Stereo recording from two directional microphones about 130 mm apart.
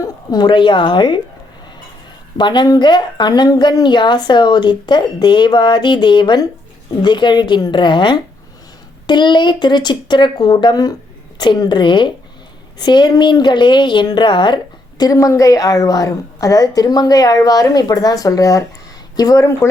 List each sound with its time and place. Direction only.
0.0 s a woman's voice: 30° left (ahead or behind)
2.4 s a woman's voice: 35° left (ahead or behind)